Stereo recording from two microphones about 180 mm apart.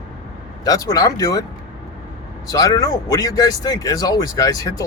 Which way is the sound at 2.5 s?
20° left (ahead or behind).